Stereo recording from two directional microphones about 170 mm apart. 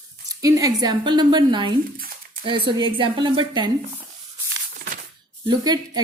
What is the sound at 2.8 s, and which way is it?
Speech, 30° right (ahead or behind).